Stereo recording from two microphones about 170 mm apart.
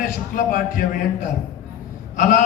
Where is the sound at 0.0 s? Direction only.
55° left (ahead or behind).